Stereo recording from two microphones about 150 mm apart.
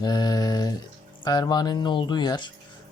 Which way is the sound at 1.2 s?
30° left (ahead or behind).